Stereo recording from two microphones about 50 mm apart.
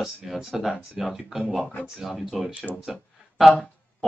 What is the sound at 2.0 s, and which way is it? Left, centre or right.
Speech, centre.